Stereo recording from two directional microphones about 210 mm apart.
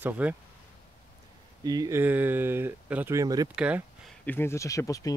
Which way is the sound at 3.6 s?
5° right (ahead or behind).